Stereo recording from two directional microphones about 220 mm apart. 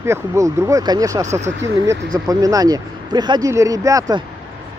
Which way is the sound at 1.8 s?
15° right (ahead or behind).